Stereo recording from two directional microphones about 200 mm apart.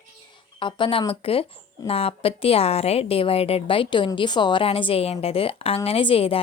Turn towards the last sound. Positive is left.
turn(degrees=30)  # may be behind; listen again after turning